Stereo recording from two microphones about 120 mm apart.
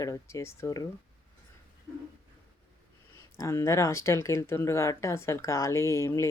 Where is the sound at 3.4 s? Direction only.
25° left (ahead or behind).